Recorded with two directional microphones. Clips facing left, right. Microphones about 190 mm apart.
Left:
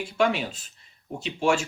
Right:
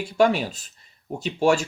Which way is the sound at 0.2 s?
40° right (ahead or behind).